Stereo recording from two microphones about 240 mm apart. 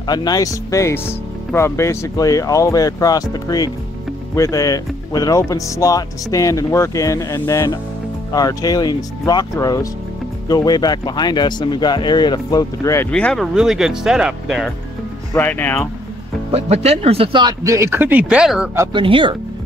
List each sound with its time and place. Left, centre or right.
0.0 s speech: centre
16.5 s speech: right; by 18.9 s centre
18.9 s speech: right